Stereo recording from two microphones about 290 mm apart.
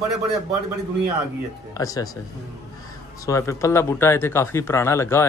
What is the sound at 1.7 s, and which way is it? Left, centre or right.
Speech, centre.